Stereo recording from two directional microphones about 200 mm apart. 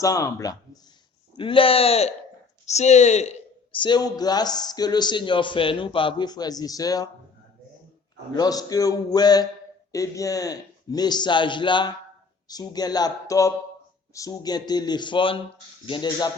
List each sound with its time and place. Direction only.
0.0 s speech: 15° left (ahead or behind)
8.4 s speech: 20° left (ahead or behind)